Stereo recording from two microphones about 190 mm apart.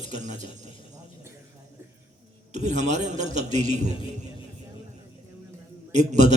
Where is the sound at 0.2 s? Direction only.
40° right (ahead or behind).